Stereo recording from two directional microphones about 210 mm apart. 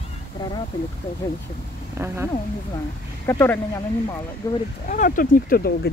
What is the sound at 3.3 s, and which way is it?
Speech, 10° left (ahead or behind).